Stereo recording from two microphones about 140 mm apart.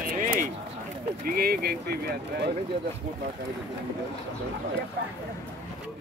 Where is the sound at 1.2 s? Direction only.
90° right.